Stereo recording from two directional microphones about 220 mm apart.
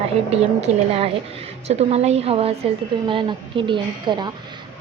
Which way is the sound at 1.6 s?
30° right (ahead or behind).